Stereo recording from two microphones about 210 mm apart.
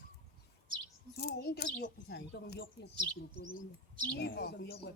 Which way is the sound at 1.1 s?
50° left (ahead or behind).